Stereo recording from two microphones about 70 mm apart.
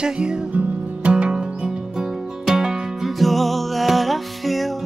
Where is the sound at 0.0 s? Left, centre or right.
Centre.